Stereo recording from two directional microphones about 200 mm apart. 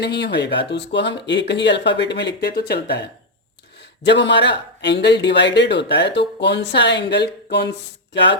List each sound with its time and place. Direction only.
0.0 s a man's voice: 60° left (ahead or behind)